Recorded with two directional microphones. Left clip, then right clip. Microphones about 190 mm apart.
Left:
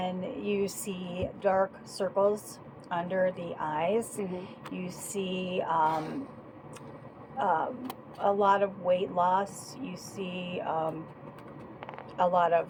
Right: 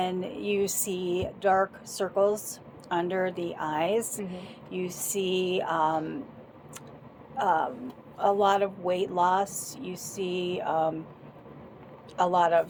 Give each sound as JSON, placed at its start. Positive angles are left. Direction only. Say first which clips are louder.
{"t": 0.0, "sound": "music", "louder": "right 4 dB", "side_deg": -50}
{"t": 2.9, "sound": "speech", "louder": "right 1 dB", "side_deg": -50}
{"t": 7.3, "sound": "speech", "louder": "right 3 dB", "side_deg": -50}
{"t": 12.1, "sound": "speech", "louder": "right 2 dB", "side_deg": -50}